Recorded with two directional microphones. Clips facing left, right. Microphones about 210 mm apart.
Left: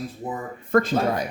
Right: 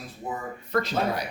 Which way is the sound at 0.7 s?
50° left (ahead or behind).